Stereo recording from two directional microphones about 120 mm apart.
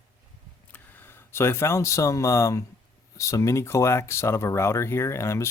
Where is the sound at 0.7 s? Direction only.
15° left (ahead or behind).